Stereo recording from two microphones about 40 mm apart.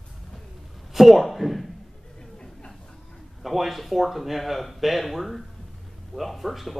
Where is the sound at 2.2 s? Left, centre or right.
Left.